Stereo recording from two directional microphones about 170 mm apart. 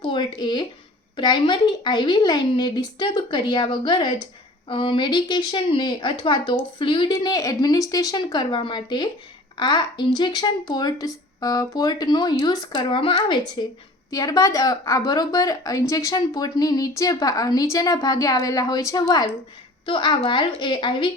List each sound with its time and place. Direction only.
0.0 s a woman's voice: 30° left (ahead or behind)